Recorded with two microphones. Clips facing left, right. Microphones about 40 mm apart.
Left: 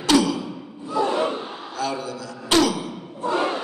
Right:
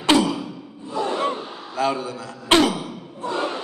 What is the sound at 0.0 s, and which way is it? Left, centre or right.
Sigh, right.